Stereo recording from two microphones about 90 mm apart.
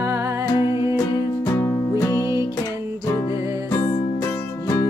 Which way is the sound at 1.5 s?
25° left (ahead or behind).